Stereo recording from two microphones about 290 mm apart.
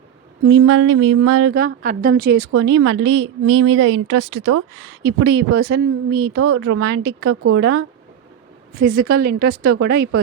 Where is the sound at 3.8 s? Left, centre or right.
Right.